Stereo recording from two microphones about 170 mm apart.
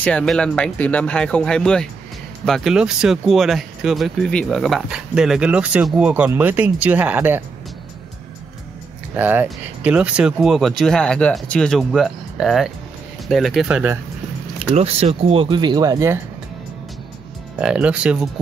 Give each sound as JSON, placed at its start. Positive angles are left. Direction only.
{"t": 0.0, "sound": "speech", "side_deg": 5}
{"t": 9.1, "sound": "speech", "side_deg": -10}
{"t": 14.8, "sound": "speech", "side_deg": -35}
{"t": 17.6, "sound": "speech", "side_deg": -5}